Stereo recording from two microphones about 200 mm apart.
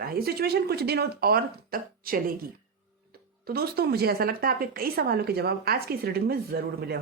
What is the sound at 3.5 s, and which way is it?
Speech, 50° right (ahead or behind).